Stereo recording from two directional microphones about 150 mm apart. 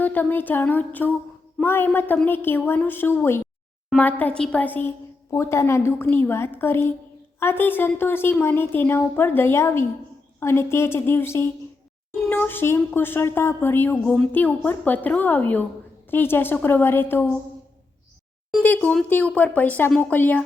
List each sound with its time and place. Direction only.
0.0 s a woman's voice: 10° left (ahead or behind)
18.6 s a woman's voice: 10° left (ahead or behind)